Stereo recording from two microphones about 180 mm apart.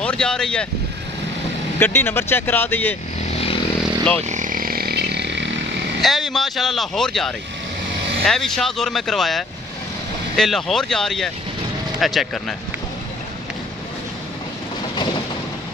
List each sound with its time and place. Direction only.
0.0 s speech: 5° left (ahead or behind)
1.8 s speech: 10° left (ahead or behind)
3.3 s vehicle: 35° left (ahead or behind)
3.8 s vehicle: 5° left (ahead or behind)
4.2 s a sound: 45° right (ahead or behind); by 5.5 s 75° right (ahead or behind)
5.9 s speech: centre (ahead or behind)